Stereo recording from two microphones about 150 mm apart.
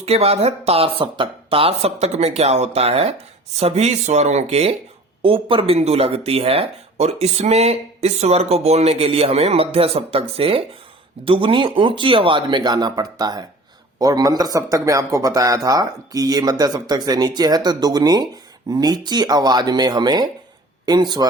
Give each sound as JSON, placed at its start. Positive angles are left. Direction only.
{"t": 0.0, "sound": "speech", "side_deg": -45}